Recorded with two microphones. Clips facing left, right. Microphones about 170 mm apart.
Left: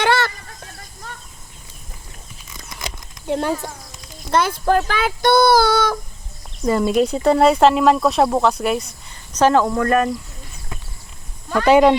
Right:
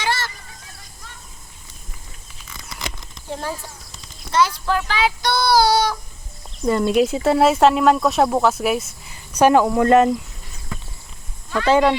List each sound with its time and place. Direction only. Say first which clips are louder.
0.0 s a sound: left 7 dB; 60° left (ahead or behind)
3.2 s speech: left 7 dB; 75° left (ahead or behind)
4.3 s speech: left 2 dB; 55° left (ahead or behind)
6.7 s speech: even; centre (ahead or behind); by 10.2 s 25° right (ahead or behind)
11.6 s speech: left 4 dB; 15° left (ahead or behind)